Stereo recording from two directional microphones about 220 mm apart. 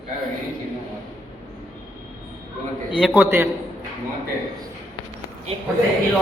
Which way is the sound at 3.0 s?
5° right (ahead or behind).